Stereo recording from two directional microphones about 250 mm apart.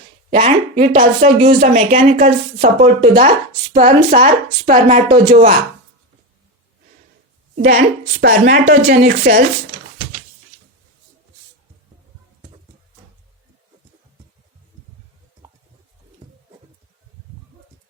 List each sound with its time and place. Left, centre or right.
0.3 s speech: right
7.5 s a woman's voice: right